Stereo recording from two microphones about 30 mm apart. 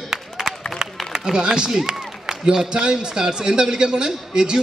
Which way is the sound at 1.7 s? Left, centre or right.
Right.